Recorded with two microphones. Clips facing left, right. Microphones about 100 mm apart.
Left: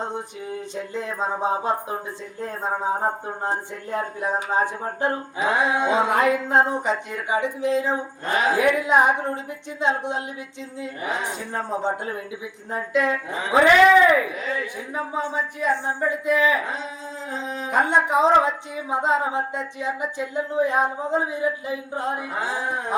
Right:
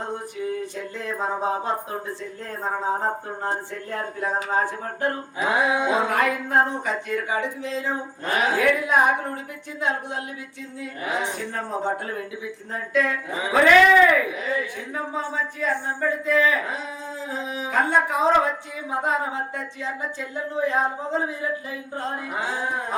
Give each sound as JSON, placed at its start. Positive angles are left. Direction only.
{"t": 0.0, "sound": "speech", "side_deg": 20}
{"t": 5.7, "sound": "music", "side_deg": -5}
{"t": 6.1, "sound": "speech", "side_deg": 20}
{"t": 11.3, "sound": "speech", "side_deg": 20}
{"t": 17.3, "sound": "dog", "side_deg": -5}
{"t": 17.7, "sound": "speech", "side_deg": 20}